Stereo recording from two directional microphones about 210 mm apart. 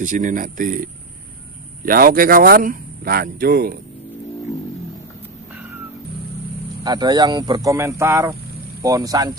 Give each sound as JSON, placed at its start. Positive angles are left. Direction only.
{"t": 0.0, "sound": "speech", "side_deg": -40}
{"t": 1.9, "sound": "speech", "side_deg": -45}
{"t": 6.8, "sound": "speech", "side_deg": -20}